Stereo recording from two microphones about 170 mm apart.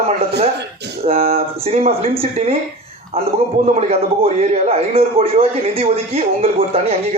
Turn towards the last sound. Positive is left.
turn(degrees=-35)  # may be behind; listen again after turning